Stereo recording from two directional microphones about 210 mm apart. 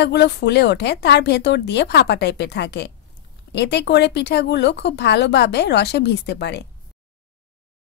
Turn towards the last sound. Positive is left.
turn(degrees=55)  # may be behind; listen again after turning